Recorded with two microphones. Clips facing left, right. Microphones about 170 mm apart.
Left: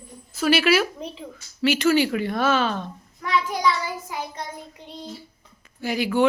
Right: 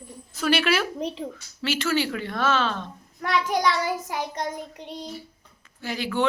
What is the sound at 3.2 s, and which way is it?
Child singing, 55° right (ahead or behind).